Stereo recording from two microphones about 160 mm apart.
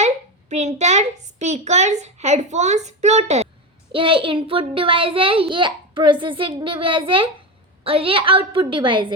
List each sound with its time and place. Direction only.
0.5 s a child's voice: 45° right (ahead or behind)
3.9 s a child's voice: 30° right (ahead or behind)